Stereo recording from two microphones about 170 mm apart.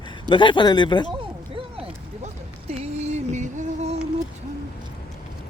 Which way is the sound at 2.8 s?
40° right (ahead or behind).